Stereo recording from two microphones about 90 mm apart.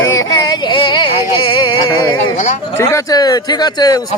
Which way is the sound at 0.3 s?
50° left (ahead or behind).